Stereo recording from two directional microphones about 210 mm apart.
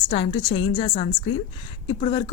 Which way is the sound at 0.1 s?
25° left (ahead or behind).